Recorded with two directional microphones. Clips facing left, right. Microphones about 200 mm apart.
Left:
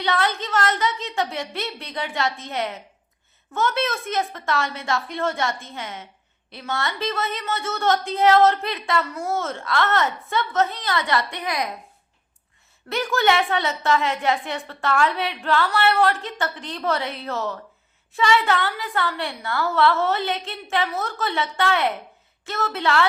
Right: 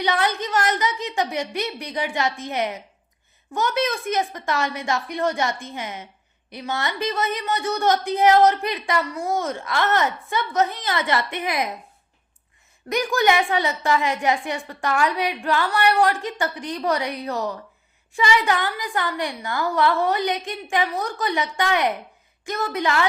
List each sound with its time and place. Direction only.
0.0 s a woman's voice: 15° right (ahead or behind)
12.9 s a woman's voice: 15° right (ahead or behind)